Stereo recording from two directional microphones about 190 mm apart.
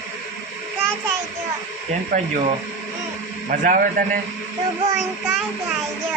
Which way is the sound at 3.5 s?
50° right (ahead or behind).